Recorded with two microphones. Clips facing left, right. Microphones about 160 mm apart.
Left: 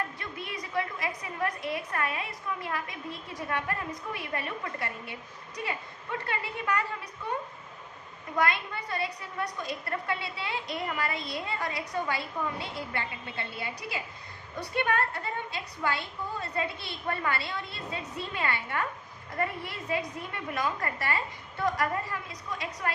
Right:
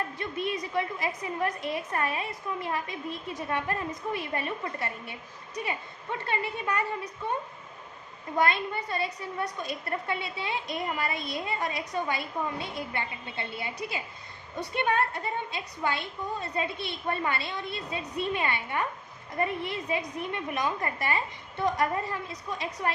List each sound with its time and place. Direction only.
0.2 s a woman's voice: 25° right (ahead or behind)
6.2 s a woman's voice: 25° right (ahead or behind)
8.4 s a woman's voice: 25° right (ahead or behind)